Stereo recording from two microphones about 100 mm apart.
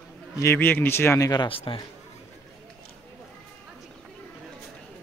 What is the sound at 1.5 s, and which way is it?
Speech, 65° left (ahead or behind).